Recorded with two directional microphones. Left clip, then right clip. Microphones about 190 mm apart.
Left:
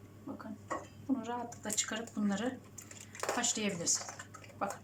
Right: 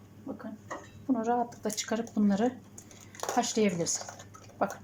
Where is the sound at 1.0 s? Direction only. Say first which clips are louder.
Right 11 dB; 40° right (ahead or behind).